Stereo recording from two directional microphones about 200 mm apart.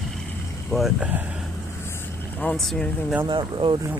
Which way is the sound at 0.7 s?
5° right (ahead or behind).